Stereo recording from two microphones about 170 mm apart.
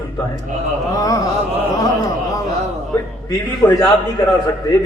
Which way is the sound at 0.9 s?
20° left (ahead or behind).